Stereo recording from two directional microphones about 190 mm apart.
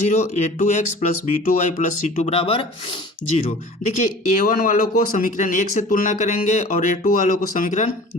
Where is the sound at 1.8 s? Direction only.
35° left (ahead or behind).